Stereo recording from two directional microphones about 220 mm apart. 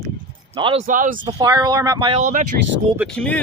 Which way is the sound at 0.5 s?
25° right (ahead or behind).